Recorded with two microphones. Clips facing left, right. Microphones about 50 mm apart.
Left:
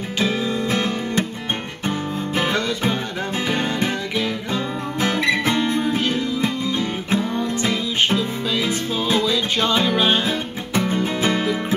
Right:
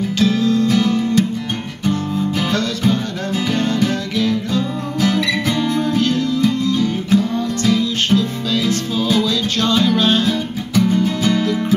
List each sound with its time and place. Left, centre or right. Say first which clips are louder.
0.2 s music: right 6 dB; centre